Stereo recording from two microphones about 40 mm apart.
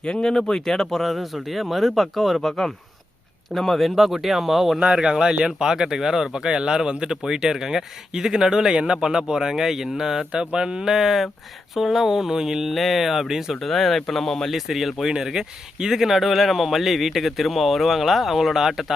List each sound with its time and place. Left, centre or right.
0.0 s speech: left; by 4.8 s centre
4.8 s speech: right
10.9 s speech: centre
12.7 s speech: centre
13.6 s speech: centre
14.5 s speech: centre